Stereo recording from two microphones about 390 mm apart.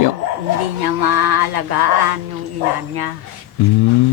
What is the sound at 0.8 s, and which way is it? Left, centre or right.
Music, right.